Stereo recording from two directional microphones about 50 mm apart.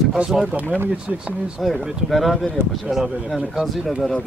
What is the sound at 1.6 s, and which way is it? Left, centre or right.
Speech, centre.